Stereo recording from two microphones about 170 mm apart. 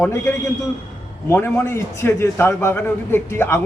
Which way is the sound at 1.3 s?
15° left (ahead or behind).